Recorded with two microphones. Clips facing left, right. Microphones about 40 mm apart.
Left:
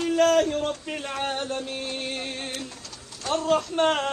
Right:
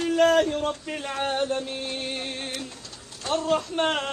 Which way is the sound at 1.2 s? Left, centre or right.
Centre.